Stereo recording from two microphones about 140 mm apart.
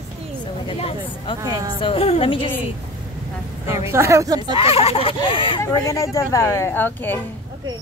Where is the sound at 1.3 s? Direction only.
25° right (ahead or behind).